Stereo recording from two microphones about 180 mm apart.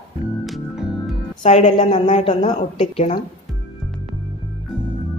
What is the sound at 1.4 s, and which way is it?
Speech, 30° left (ahead or behind).